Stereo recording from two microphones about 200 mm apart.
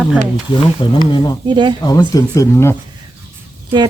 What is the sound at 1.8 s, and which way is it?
Speech, 20° left (ahead or behind).